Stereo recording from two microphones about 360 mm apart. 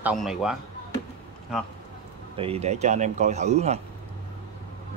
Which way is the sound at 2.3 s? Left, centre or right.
Centre.